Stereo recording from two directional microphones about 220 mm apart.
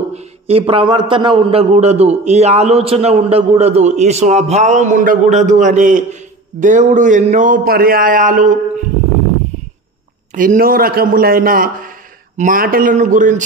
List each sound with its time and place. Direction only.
0.1 s a man's voice: 30° right (ahead or behind)
10.3 s a man's voice: 35° right (ahead or behind)